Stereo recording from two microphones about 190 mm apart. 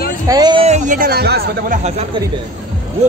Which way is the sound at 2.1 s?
25° right (ahead or behind).